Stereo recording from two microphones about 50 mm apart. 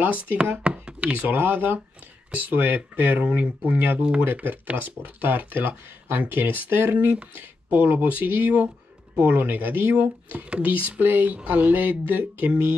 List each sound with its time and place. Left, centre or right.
0.0 s speech: right
0.7 s knock: right
1.1 s speech: right
3.3 s speech: right
3.7 s speech: right
9.9 s speech: right